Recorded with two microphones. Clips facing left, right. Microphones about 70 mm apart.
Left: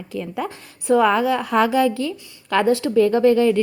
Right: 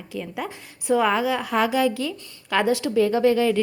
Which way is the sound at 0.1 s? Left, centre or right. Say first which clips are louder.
Left 4 dB; left.